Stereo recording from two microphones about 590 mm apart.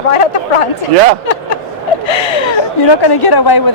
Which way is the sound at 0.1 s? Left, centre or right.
Left.